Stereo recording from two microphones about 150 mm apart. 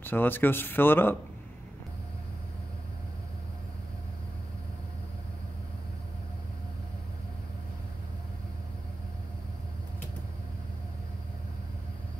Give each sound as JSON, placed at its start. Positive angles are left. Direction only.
{"t": 0.0, "sound": "speech", "side_deg": 15}